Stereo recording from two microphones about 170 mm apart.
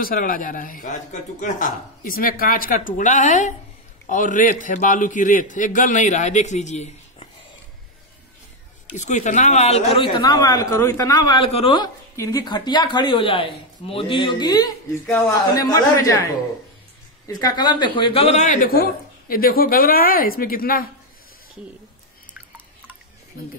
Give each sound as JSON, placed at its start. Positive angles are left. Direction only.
{"t": 0.0, "sound": "a man's voice", "side_deg": 55}
{"t": 8.9, "sound": "speech", "side_deg": 45}
{"t": 17.3, "sound": "speech", "side_deg": 25}